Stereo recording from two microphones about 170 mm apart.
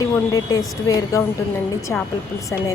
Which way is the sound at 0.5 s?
20° left (ahead or behind).